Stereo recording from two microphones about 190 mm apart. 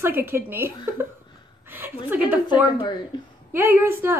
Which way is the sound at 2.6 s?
25° left (ahead or behind).